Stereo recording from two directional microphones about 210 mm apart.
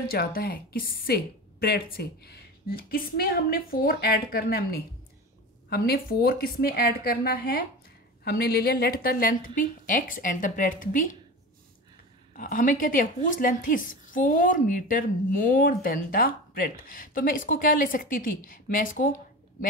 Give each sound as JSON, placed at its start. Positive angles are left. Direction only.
{"t": 0.1, "sound": "a woman's voice", "side_deg": 45}
{"t": 12.4, "sound": "a woman's voice", "side_deg": 40}